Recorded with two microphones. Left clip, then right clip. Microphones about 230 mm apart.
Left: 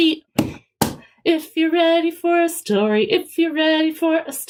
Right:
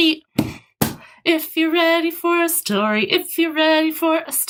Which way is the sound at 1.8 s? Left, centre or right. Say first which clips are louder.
Left 1 dB; right.